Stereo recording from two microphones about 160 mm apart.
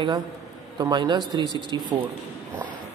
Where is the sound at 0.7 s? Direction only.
25° right (ahead or behind).